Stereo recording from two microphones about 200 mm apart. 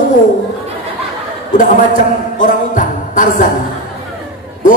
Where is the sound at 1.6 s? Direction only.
40° left (ahead or behind).